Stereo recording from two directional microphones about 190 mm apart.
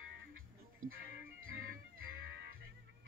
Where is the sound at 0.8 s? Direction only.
90° right.